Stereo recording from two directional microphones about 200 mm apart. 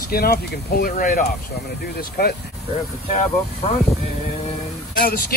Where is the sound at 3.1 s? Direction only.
30° left (ahead or behind).